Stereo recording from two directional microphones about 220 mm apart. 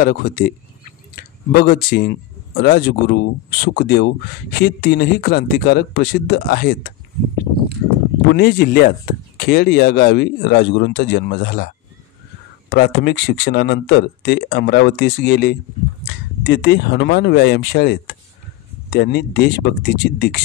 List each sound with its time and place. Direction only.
0.0 s speech: 40° left (ahead or behind)
8.3 s speech: 45° left (ahead or behind)